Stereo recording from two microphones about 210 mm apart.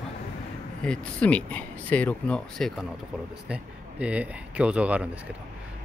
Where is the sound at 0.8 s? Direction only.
5° left (ahead or behind).